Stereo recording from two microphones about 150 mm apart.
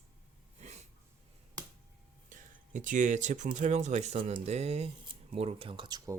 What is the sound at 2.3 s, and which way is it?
Speech, 60° right (ahead or behind).